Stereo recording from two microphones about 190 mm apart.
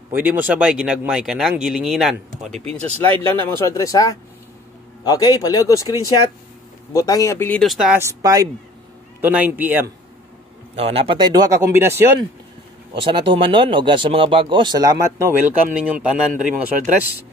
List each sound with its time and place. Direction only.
0.1 s speech: 10° right (ahead or behind)
3.0 s a man's voice: 10° left (ahead or behind); by 9.8 s 10° right (ahead or behind)
10.8 s speech: 30° right (ahead or behind); by 12.0 s 15° right (ahead or behind)
12.9 s speech: 30° right (ahead or behind); by 16.5 s 5° right (ahead or behind)